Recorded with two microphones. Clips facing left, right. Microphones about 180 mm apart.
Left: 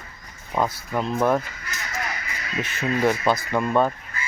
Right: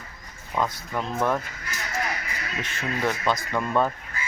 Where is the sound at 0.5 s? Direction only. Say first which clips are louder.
Left 3 dB; 20° left (ahead or behind).